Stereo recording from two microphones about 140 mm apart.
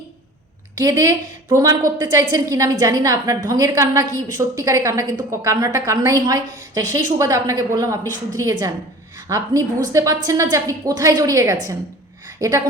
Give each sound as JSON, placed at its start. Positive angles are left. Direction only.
{"t": 0.8, "sound": "a woman's voice", "side_deg": -25}